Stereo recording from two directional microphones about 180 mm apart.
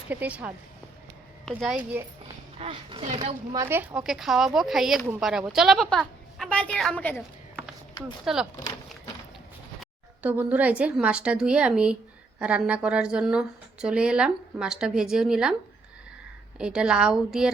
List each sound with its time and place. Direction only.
0.1 s a woman's voice: 10° right (ahead or behind)
2.6 s speech: 30° right (ahead or behind)
3.5 s a woman's voice: 15° right (ahead or behind); by 7.2 s 10° left (ahead or behind)
8.0 s a woman's voice: 5° right (ahead or behind)
10.2 s a woman's voice: 10° right (ahead or behind)
16.6 s a woman's voice: 5° right (ahead or behind)